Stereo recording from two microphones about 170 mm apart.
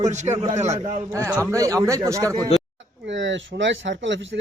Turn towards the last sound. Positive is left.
turn(degrees=-90)